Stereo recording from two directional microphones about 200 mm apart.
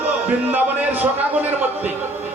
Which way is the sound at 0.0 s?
10° right (ahead or behind).